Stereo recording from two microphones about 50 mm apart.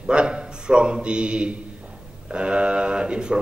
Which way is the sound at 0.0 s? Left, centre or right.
Centre.